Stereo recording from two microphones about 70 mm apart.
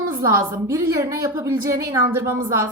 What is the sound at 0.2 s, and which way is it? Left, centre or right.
A woman's voice, right.